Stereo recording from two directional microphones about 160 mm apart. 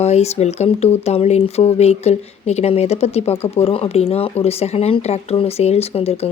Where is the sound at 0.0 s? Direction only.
40° left (ahead or behind).